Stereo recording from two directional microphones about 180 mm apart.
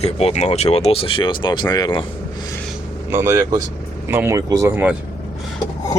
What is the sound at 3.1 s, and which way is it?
Speech, 15° right (ahead or behind).